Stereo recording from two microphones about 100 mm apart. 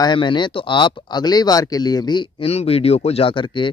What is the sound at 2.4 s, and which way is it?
Speech, 80° left.